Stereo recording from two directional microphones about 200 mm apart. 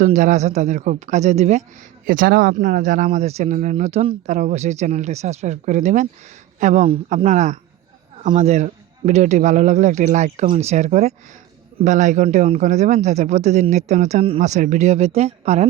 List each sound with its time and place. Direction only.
0.0 s speech: 35° right (ahead or behind)
7.3 s speech: 40° right (ahead or behind)